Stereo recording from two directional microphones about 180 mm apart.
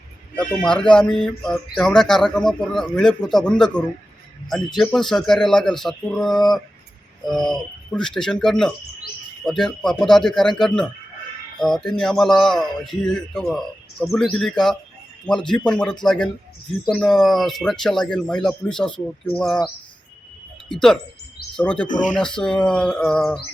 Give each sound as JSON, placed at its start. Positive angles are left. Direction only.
{"t": 0.3, "sound": "speech", "side_deg": 5}
{"t": 11.6, "sound": "speech", "side_deg": 0}
{"t": 20.7, "sound": "speech", "side_deg": 0}
{"t": 21.8, "sound": "speech", "side_deg": 45}
{"t": 22.1, "sound": "speech", "side_deg": 5}